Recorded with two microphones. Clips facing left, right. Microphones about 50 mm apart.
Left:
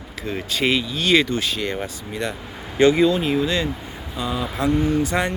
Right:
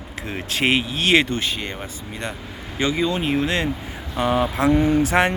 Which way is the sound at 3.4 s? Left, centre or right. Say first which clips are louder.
Even; right.